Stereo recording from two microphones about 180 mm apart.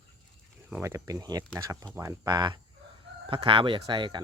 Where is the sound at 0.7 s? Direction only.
15° right (ahead or behind).